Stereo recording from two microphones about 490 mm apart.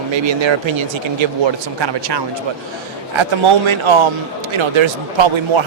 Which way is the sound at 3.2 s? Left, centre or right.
Right.